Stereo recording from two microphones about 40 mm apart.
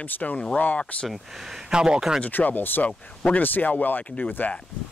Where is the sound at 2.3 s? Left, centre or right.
Left.